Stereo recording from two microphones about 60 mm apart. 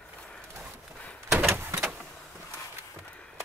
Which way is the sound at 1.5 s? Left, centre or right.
Right.